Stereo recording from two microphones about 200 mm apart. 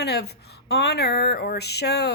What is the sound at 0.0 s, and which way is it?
A woman's voice, 55° left (ahead or behind).